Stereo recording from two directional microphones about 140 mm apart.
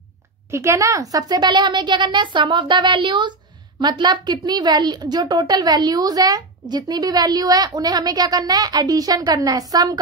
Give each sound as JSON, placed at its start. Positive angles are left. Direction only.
{"t": 0.5, "sound": "a woman's voice", "side_deg": -20}